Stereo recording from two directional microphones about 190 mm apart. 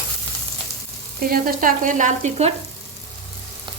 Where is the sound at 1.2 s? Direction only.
50° right (ahead or behind).